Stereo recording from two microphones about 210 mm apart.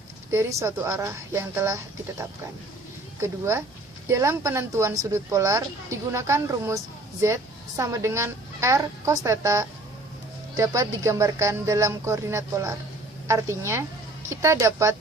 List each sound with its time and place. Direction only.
0.3 s speech: 15° right (ahead or behind)
7.8 s speech: 15° right (ahead or behind)